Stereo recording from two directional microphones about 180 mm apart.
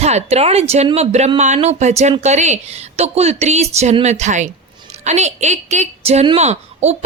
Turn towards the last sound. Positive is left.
turn(degrees=-40)  # may be behind; listen again after turning